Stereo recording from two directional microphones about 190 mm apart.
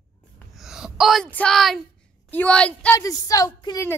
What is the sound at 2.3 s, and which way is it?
Speech, 5° left (ahead or behind).